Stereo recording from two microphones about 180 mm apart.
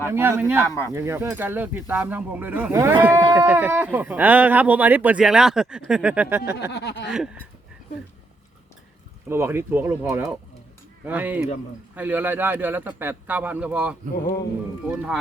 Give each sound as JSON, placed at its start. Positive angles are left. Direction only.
{"t": 0.0, "sound": "speech", "side_deg": -15}
{"t": 6.6, "sound": "speech", "side_deg": 70}
{"t": 9.3, "sound": "speech", "side_deg": -15}